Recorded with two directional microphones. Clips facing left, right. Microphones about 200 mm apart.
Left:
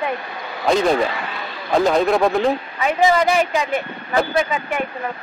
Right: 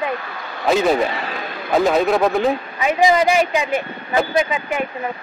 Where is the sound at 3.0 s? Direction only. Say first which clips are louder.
Right 1 dB; 15° right (ahead or behind).